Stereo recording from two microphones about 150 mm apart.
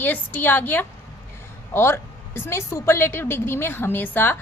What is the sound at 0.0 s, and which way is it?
A woman's voice, 10° left (ahead or behind).